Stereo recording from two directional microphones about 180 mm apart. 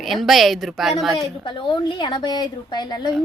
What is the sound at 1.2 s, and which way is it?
A woman's voice, 25° left (ahead or behind).